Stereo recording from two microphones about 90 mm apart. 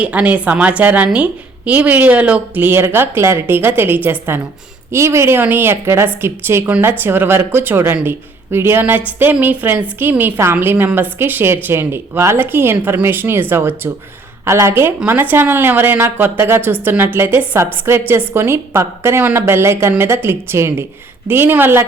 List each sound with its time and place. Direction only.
0.0 s a woman's voice: 15° right (ahead or behind)